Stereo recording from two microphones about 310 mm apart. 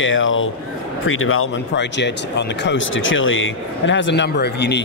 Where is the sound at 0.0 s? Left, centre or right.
Left.